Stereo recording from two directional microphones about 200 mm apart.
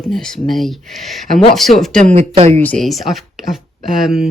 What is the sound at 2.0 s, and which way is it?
Speech, 30° right (ahead or behind).